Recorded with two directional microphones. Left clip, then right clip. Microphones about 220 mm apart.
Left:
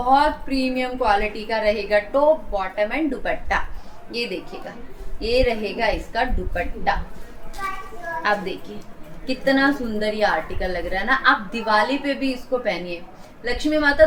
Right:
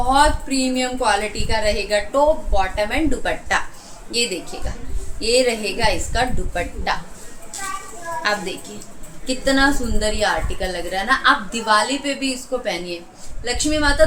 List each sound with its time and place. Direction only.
0.1 s a woman's voice: 15° right (ahead or behind)
5.2 s a woman's voice: 15° right (ahead or behind)
8.2 s a woman's voice: 15° right (ahead or behind)